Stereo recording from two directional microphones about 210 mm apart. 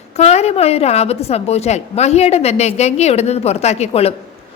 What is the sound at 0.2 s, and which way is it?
A woman's voice, 30° left (ahead or behind).